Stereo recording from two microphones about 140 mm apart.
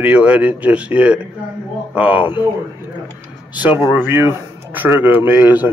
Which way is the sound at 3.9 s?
15° right (ahead or behind).